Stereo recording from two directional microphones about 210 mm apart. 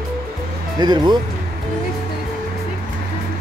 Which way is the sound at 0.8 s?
20° right (ahead or behind).